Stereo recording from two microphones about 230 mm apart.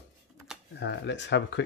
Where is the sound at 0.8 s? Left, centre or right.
Left.